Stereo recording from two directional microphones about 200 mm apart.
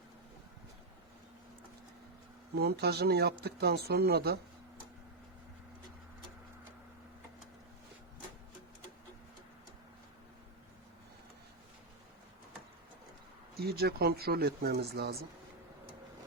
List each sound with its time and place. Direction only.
2.6 s speech: 55° right (ahead or behind)
13.6 s speech: 55° right (ahead or behind)